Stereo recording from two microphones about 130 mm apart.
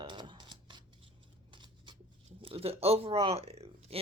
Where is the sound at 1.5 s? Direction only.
40° right (ahead or behind).